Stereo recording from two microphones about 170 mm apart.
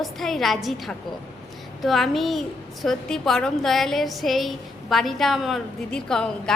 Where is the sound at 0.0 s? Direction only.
Centre (ahead or behind).